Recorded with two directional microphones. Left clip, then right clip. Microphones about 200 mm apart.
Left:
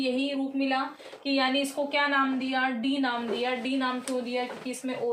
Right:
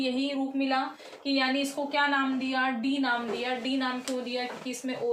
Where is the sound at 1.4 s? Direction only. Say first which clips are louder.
Left 2 dB; 20° left (ahead or behind).